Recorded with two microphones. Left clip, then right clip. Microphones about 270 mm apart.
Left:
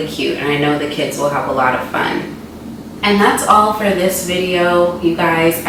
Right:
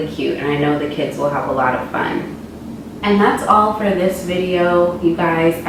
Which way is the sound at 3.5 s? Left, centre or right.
Right.